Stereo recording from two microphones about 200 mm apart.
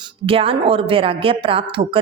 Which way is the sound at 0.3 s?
25° right (ahead or behind).